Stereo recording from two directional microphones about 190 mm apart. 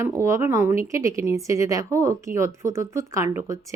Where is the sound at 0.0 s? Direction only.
15° right (ahead or behind).